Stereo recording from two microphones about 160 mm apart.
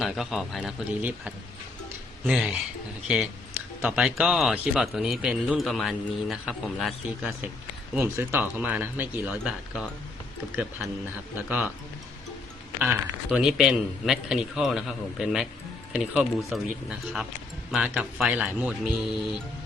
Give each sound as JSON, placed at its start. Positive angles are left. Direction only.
{"t": 0.0, "sound": "speech", "side_deg": 0}
{"t": 3.8, "sound": "speech", "side_deg": -10}
{"t": 7.9, "sound": "speech", "side_deg": -15}
{"t": 12.8, "sound": "speech", "side_deg": -10}
{"t": 17.7, "sound": "speech", "side_deg": -5}